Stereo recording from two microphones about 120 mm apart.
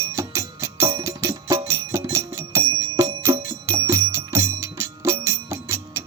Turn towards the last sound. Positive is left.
turn(degrees=-25)  # may be behind; listen again after turning